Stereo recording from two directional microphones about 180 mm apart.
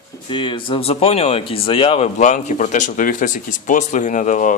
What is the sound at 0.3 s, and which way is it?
A man's voice, 25° left (ahead or behind).